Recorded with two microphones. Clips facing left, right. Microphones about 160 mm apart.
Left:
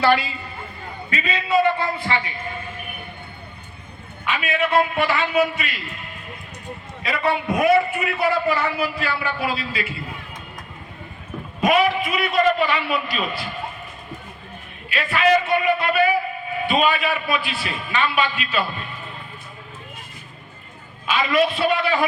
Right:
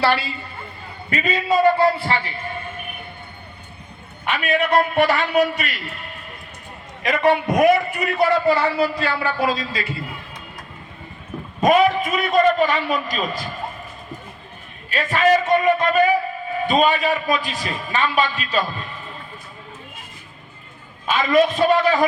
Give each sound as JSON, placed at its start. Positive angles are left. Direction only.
{"t": 0.0, "sound": "a man's voice", "side_deg": -35}
{"t": 4.3, "sound": "a man's voice", "side_deg": -40}
{"t": 7.1, "sound": "a man's voice", "side_deg": -45}
{"t": 11.6, "sound": "a man's voice", "side_deg": -40}
{"t": 14.8, "sound": "a man's voice", "side_deg": -40}
{"t": 21.1, "sound": "a man's voice", "side_deg": -45}